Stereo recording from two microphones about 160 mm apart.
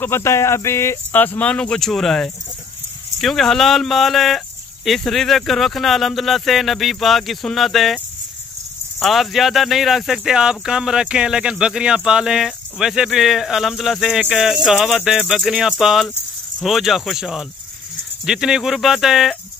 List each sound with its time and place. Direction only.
0.0 s speech: 15° left (ahead or behind)
9.0 s speech: centre (ahead or behind)